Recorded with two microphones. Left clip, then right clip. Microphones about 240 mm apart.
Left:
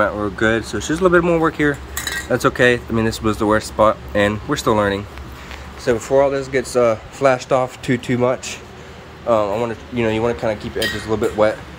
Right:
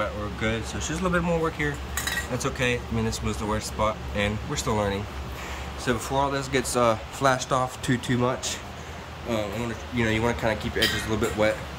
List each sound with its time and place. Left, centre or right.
0.0 s speech: centre